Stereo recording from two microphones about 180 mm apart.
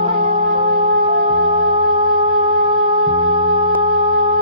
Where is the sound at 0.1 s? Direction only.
30° right (ahead or behind).